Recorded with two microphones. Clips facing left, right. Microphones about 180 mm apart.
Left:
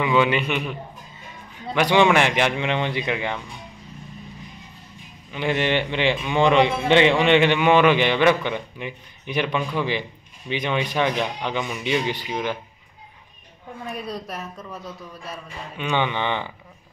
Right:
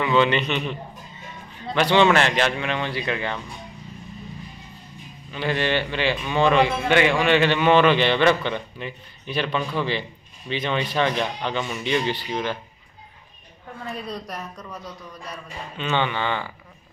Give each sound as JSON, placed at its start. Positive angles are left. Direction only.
{"t": 0.0, "sound": "a man's voice", "side_deg": 10}
{"t": 5.3, "sound": "a man's voice", "side_deg": 15}
{"t": 13.7, "sound": "a woman's voice", "side_deg": 10}
{"t": 15.9, "sound": "speech", "side_deg": 15}